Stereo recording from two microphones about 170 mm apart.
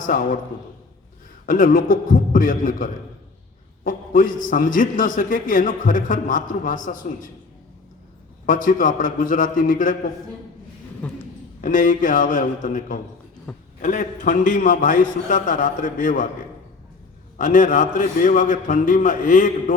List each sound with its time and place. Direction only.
0.0 s a man's voice: 55° left (ahead or behind)
1.5 s a man's voice: 55° left (ahead or behind)
8.4 s a man's voice: 50° left (ahead or behind)
11.0 s speech: 10° left (ahead or behind)
11.6 s a man's voice: 50° left (ahead or behind)
17.3 s a man's voice: 50° left (ahead or behind)